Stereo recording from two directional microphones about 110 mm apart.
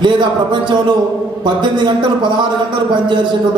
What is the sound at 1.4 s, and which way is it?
A man's voice, 45° right (ahead or behind).